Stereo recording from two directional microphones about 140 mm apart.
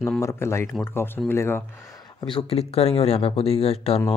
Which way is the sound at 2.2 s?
40° left (ahead or behind).